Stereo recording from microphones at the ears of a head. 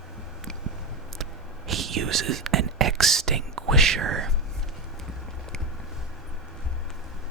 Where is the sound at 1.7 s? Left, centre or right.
Right.